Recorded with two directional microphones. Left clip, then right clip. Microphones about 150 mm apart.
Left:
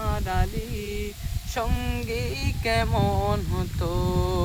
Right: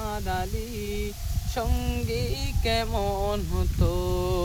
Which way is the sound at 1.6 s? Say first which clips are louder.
Left 2 dB; 15° left (ahead or behind).